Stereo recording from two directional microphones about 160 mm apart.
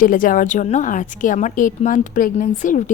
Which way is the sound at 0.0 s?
60° left (ahead or behind).